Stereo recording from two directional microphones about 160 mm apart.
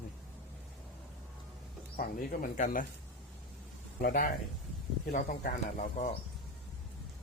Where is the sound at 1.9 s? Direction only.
55° left (ahead or behind).